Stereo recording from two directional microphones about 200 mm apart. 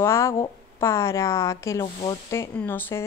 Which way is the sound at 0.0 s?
15° left (ahead or behind).